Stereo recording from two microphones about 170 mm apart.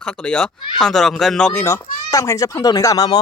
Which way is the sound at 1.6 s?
20° left (ahead or behind).